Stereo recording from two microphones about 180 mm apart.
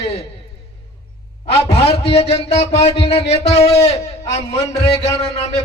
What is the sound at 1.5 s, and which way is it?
A man's voice, 35° left (ahead or behind).